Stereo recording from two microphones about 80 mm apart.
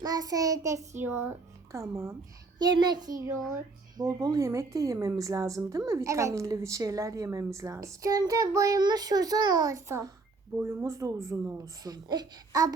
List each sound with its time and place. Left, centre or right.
0.0 s a woman's voice: right
1.0 s speech: right
1.7 s a woman's voice: right
2.6 s a child's voice: right
8.8 s a woman's voice: right
10.6 s a woman's voice: right
10.8 s a woman's voice: right